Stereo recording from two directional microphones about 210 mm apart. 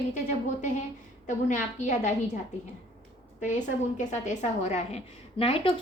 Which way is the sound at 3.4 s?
35° left (ahead or behind).